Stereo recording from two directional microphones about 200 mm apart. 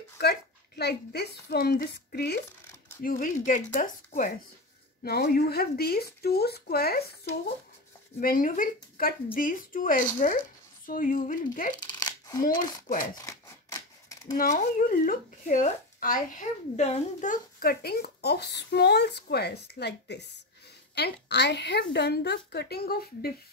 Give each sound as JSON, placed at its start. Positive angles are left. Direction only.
{"t": 0.2, "sound": "speech", "side_deg": 55}
{"t": 11.8, "sound": "shuffling cards", "side_deg": 20}
{"t": 13.0, "sound": "a sound", "side_deg": 15}
{"t": 14.3, "sound": "a woman's voice", "side_deg": 40}